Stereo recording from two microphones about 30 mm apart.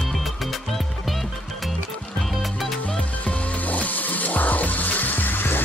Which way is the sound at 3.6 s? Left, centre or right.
Left.